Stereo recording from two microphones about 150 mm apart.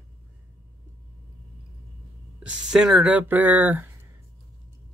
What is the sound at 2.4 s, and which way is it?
Speech, 5° right (ahead or behind).